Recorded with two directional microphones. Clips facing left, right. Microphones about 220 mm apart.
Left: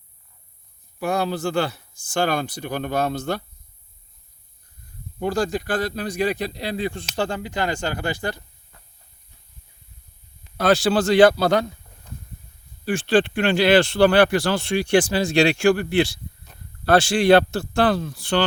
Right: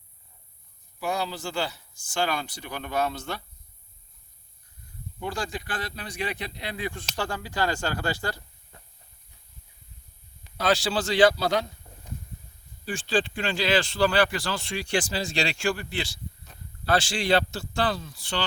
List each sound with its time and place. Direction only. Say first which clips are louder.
0.9 s speech: left 6 dB; 55° left (ahead or behind)
5.2 s speech: left 9 dB; 40° left (ahead or behind); by 8.4 s 20° left (ahead or behind)
10.6 s speech: left 7 dB; 50° left (ahead or behind)
11.9 s a sound: right 3 dB; 30° right (ahead or behind)
12.8 s speech: left 8 dB; 70° left (ahead or behind)